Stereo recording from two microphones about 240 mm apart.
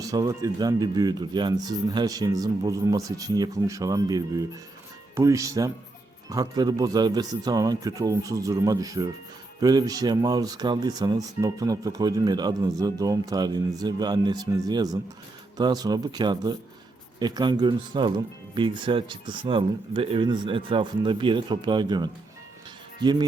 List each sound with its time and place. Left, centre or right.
0.0 s speech: centre